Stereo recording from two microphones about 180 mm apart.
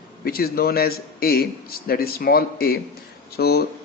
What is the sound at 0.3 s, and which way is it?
Speech, 55° left (ahead or behind).